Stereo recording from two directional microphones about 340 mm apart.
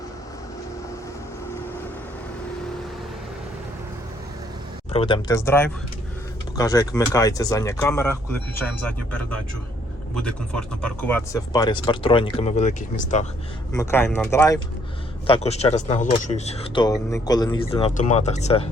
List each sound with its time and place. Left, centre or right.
4.9 s speech: centre
10.2 s speech: centre
13.7 s speech: centre